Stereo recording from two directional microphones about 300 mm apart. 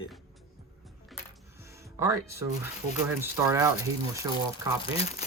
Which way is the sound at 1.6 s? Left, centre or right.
Centre.